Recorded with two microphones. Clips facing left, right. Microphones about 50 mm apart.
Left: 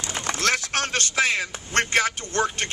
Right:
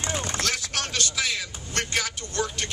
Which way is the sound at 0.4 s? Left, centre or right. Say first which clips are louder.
Left 5 dB; left.